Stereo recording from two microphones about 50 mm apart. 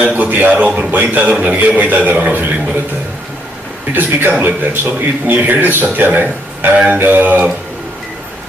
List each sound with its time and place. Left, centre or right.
0.0 s a man's voice: right
0.3 s a man's voice: right
3.9 s a man's voice: right